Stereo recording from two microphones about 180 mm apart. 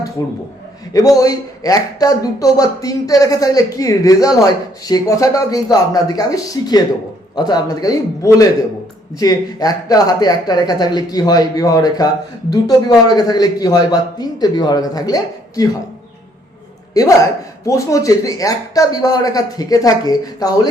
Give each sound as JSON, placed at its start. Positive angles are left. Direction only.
{"t": 0.2, "sound": "speech", "side_deg": 20}
{"t": 16.9, "sound": "speech", "side_deg": 20}